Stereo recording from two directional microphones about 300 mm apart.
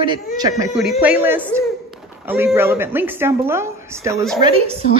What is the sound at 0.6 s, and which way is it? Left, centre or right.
A woman's voice, centre.